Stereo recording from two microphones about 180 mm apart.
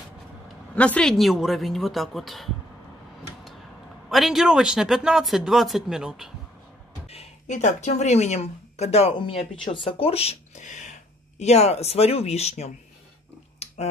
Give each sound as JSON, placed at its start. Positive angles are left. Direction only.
{"t": 0.7, "sound": "speech", "side_deg": 5}
{"t": 4.1, "sound": "speech", "side_deg": 0}
{"t": 7.1, "sound": "speech", "side_deg": 40}
{"t": 13.6, "sound": "finger snapping", "side_deg": 35}